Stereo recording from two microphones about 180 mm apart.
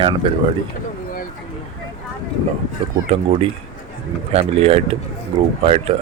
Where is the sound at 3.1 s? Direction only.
30° right (ahead or behind).